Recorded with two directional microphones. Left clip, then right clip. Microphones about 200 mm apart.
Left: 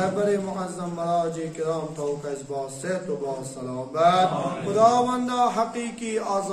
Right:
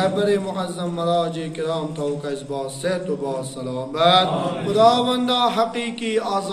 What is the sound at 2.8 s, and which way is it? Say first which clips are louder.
A man's voice: right 5 dB; 15° left (ahead or behind).